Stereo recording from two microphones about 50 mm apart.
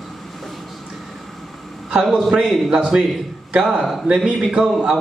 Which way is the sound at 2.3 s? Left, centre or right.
Centre.